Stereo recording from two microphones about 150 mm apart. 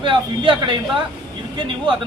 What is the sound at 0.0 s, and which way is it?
Speech, 35° right (ahead or behind).